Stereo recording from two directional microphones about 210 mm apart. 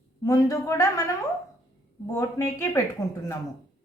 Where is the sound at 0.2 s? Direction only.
15° left (ahead or behind).